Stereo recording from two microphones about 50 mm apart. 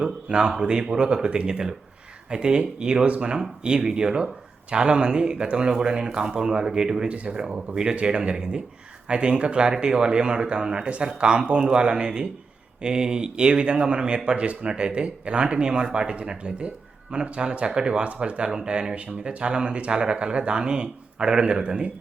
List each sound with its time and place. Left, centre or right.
0.0 s speech: centre